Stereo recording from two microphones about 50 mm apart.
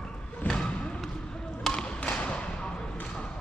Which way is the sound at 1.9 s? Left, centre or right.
Left.